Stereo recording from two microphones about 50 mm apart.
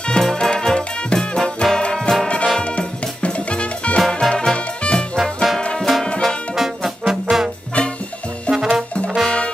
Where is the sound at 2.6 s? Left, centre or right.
Left.